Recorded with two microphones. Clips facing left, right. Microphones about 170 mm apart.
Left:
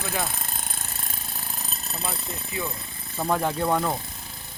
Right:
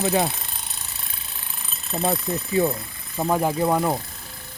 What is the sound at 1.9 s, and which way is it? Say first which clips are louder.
Speech: right 11 dB; 35° right (ahead or behind).